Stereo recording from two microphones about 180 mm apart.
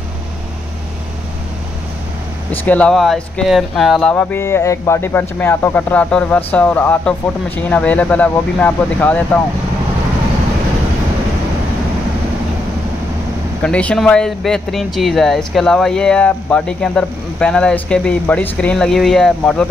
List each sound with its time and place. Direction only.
2.5 s speech: 10° left (ahead or behind)
13.6 s speech: 5° left (ahead or behind)